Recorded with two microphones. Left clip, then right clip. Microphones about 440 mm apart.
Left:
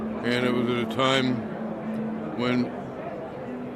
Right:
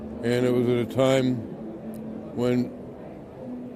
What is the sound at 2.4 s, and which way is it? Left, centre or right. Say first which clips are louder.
Speech: right 1 dB; right.